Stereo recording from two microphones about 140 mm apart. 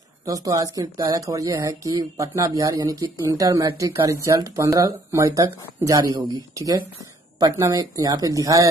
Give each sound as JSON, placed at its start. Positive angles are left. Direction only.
{"t": 0.2, "sound": "speech", "side_deg": -25}